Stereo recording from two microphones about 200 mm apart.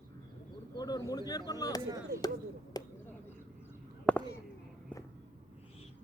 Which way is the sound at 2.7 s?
20° left (ahead or behind).